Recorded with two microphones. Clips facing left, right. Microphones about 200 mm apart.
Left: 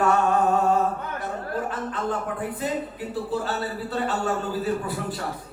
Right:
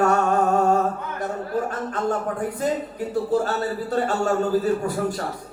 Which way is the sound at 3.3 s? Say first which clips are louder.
Right 5 dB; 45° right (ahead or behind).